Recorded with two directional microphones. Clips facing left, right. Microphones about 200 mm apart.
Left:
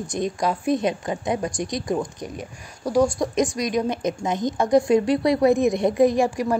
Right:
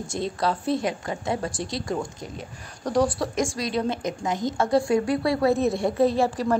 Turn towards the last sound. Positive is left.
turn(degrees=15)  # may be behind; listen again after turning